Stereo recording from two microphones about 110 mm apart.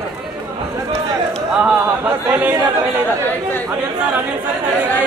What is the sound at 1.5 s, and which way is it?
A capella, 15° right (ahead or behind).